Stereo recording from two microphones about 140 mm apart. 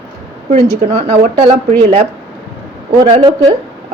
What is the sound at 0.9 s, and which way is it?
A woman's voice, 50° right (ahead or behind).